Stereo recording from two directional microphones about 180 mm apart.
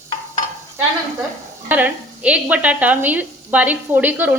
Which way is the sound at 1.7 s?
10° right (ahead or behind).